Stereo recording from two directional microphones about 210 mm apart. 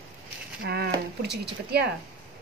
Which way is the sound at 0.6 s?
50° right (ahead or behind).